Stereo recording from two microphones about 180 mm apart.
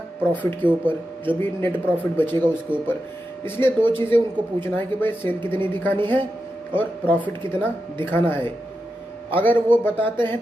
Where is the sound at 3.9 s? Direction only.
30° right (ahead or behind).